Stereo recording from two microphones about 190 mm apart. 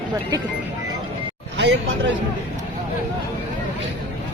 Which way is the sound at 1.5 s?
70° right (ahead or behind).